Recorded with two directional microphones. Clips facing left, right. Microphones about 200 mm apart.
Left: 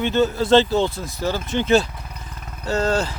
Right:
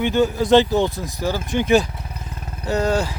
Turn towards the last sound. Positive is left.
turn(degrees=-15)  # may be behind; listen again after turning